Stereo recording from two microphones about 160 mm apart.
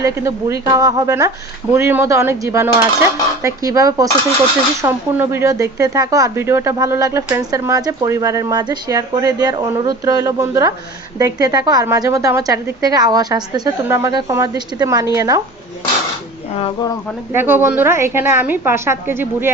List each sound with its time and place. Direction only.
0.0 s speech: 20° right (ahead or behind)
16.6 s speech: 35° left (ahead or behind)
17.3 s a woman's voice: 15° right (ahead or behind)